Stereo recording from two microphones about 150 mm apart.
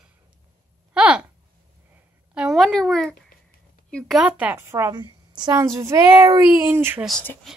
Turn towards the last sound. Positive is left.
turn(degrees=-15)  # may be behind; listen again after turning